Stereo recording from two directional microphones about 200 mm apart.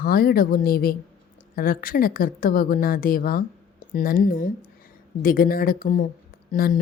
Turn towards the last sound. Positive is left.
turn(degrees=45)  # may be behind; listen again after turning